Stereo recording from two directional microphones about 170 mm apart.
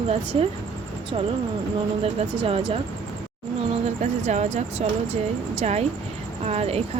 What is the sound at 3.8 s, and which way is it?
Speech, 40° right (ahead or behind).